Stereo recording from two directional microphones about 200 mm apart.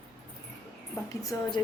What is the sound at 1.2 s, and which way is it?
Speech, 15° left (ahead or behind).